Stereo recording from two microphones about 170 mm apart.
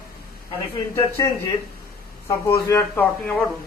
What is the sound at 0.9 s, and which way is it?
Speech, 20° left (ahead or behind).